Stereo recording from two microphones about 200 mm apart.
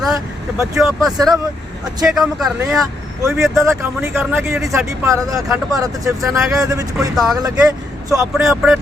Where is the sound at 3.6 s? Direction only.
15° right (ahead or behind).